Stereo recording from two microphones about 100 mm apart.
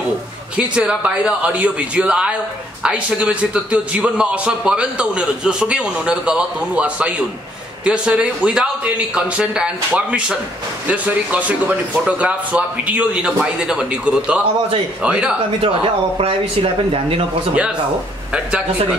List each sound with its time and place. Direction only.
0.6 s a man's voice: 10° right (ahead or behind)
15.6 s speech: 70° right (ahead or behind)
18.3 s a man's voice: 10° right (ahead or behind)